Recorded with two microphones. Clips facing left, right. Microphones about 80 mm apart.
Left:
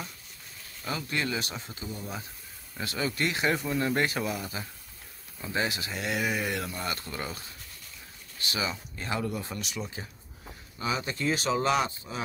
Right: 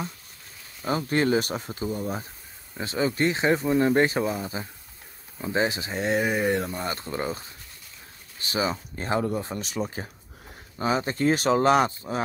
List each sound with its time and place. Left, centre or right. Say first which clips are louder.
0.8 s speech: right 8 dB; right
2.8 s speech: right 6 dB; right
8.5 s speech: right 6 dB; right